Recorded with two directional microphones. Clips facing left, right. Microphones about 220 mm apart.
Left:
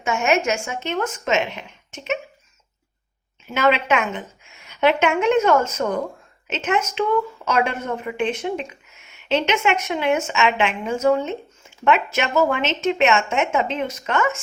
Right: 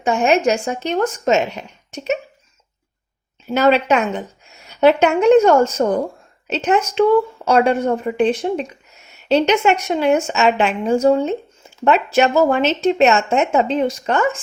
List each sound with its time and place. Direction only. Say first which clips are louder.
0.0 s a woman's voice: right 5 dB; 35° right (ahead or behind)
3.4 s a woman's voice: right 5 dB; 35° right (ahead or behind)